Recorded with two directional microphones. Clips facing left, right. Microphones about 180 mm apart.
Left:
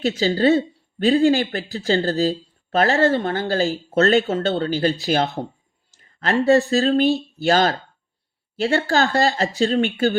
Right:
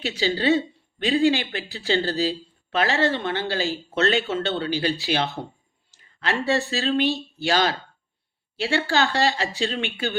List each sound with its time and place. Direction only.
0.0 s speech: 40° left (ahead or behind)
5.9 s a sound: 45° left (ahead or behind)
6.4 s speech: 40° left (ahead or behind)